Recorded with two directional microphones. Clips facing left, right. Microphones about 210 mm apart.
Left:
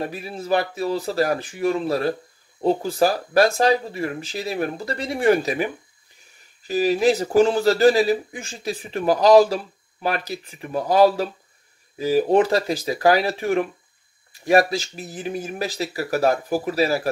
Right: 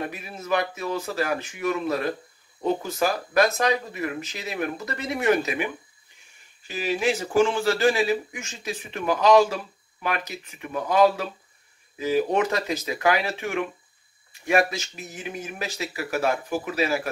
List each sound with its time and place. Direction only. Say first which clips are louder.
0.0 s speech: left 4 dB; 35° left (ahead or behind)
6.7 s speech: left 7 dB; 40° left (ahead or behind)